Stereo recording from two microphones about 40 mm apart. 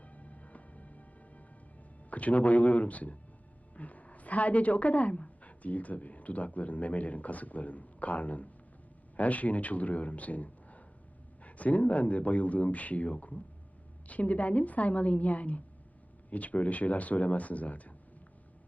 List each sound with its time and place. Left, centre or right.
0.0 s music: left
2.0 s a woman's voice: left